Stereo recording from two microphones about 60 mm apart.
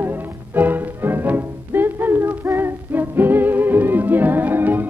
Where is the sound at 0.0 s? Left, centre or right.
Right.